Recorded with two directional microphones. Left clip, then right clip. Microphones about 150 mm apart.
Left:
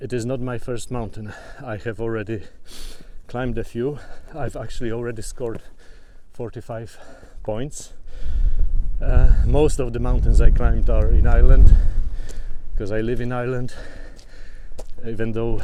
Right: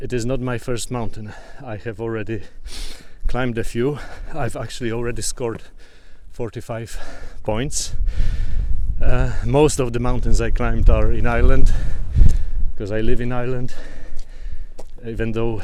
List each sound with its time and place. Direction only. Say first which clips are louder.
0.0 s speech: right 2 dB; 15° right (ahead or behind)
3.2 s speech: right 3 dB; 20° right (ahead or behind)
12.8 s speech: right 1 dB; 15° right (ahead or behind)